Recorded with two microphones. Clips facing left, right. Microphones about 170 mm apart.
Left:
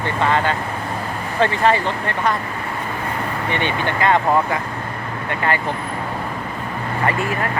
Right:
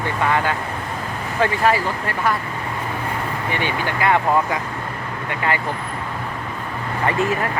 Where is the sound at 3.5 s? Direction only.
10° right (ahead or behind).